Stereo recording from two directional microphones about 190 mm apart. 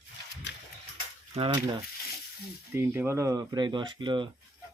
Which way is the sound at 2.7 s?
10° right (ahead or behind).